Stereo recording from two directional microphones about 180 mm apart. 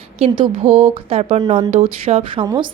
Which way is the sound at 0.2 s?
30° right (ahead or behind).